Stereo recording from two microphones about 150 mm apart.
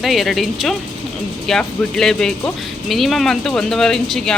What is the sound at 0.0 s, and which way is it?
Speech, centre (ahead or behind).